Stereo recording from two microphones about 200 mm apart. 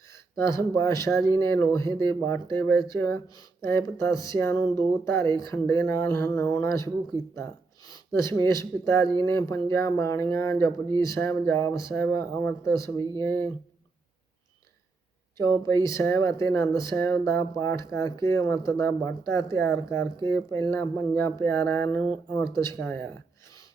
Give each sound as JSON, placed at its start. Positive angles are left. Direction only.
{"t": 0.1, "sound": "speech", "side_deg": 15}
{"t": 15.4, "sound": "speech", "side_deg": 15}